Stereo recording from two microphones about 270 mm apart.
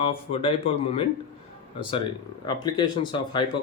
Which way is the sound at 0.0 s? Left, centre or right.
Centre.